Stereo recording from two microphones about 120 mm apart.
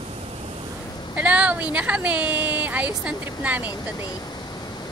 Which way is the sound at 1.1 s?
10° right (ahead or behind).